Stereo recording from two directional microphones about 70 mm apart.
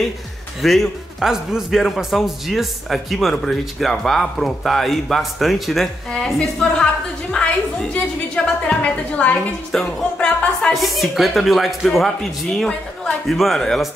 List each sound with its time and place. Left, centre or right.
0.6 s a man's voice: centre
8.6 s a woman's voice: centre
9.7 s speech: centre
10.1 s speech: centre
10.7 s speech: centre